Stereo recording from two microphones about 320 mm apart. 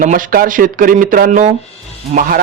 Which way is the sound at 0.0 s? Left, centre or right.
Right.